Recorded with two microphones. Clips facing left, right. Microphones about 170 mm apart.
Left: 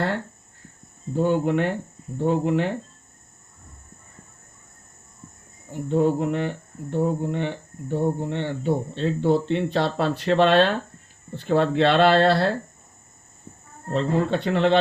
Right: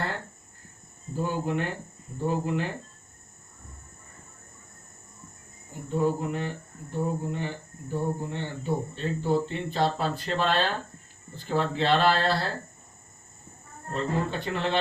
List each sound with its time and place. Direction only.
1.1 s speech: 65° left (ahead or behind)
5.9 s speech: 70° left (ahead or behind)
13.9 s speech: 70° left (ahead or behind)